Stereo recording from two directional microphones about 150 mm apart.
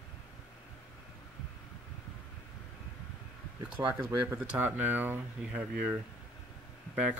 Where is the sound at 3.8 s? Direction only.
25° right (ahead or behind).